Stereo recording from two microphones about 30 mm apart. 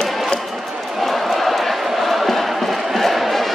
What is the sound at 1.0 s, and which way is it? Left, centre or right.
Crowd, centre.